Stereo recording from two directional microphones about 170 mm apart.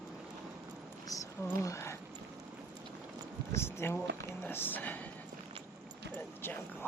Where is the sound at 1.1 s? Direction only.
20° left (ahead or behind).